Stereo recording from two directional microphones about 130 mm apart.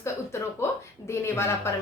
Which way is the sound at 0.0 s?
20° left (ahead or behind).